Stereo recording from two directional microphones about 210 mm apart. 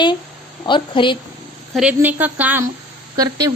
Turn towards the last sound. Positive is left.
turn(degrees=-15)  # may be behind; listen again after turning